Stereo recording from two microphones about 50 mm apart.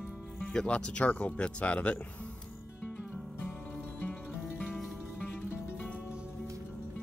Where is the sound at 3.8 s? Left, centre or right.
Left.